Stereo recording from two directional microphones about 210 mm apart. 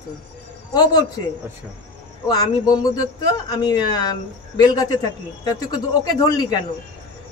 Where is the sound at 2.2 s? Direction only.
20° left (ahead or behind).